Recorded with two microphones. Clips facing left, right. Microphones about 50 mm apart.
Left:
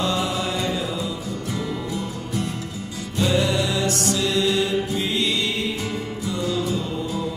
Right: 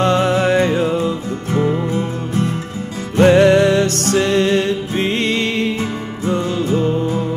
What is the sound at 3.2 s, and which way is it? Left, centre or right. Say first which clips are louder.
Music: right 11 dB; right.